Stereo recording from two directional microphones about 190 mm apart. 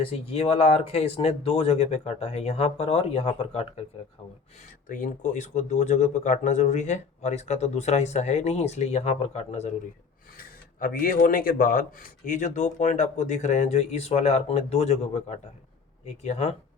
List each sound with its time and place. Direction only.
0.0 s speech: 30° left (ahead or behind)
4.9 s speech: 45° left (ahead or behind)
10.3 s speech: 50° left (ahead or behind)